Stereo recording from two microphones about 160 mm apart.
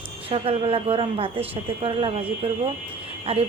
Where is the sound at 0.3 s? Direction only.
35° right (ahead or behind).